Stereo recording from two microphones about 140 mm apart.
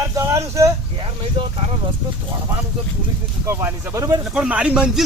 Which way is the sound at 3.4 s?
20° right (ahead or behind).